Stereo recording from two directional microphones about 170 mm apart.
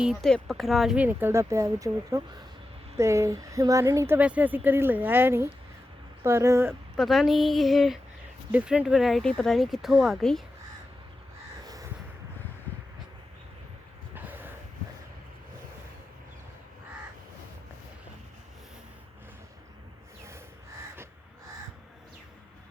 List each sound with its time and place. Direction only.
0.0 s speech: centre (ahead or behind); by 6.7 s 15° right (ahead or behind)
6.9 s speech: centre (ahead or behind)
11.6 s crow: 20° right (ahead or behind)
14.1 s a sound: 10° right (ahead or behind)